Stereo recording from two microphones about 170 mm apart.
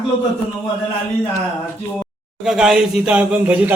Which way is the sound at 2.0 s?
Centre (ahead or behind).